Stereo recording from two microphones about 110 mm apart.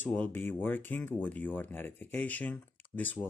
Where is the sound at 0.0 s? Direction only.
15° left (ahead or behind).